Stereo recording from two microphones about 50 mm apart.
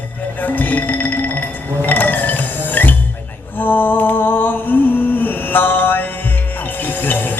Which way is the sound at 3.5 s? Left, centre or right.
Left.